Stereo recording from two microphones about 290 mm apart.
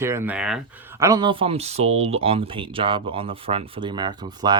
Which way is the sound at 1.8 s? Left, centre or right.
Right.